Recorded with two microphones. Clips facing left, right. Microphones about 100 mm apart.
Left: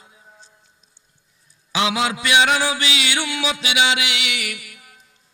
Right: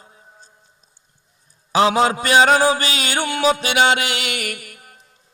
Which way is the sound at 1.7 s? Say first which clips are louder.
Right 6 dB; 40° right (ahead or behind).